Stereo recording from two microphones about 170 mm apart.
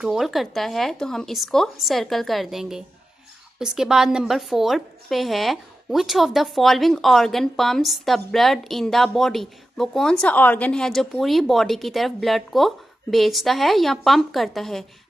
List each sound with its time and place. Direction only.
0.0 s a woman's voice: 5° right (ahead or behind)